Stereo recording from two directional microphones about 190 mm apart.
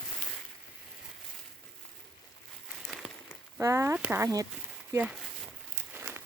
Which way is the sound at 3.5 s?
15° right (ahead or behind).